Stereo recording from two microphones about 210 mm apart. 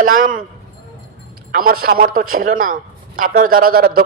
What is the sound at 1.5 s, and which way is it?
A man's voice, 45° right (ahead or behind).